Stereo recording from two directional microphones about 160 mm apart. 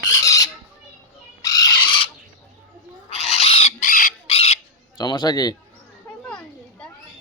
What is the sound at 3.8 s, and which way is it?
Chicken, 55° left (ahead or behind).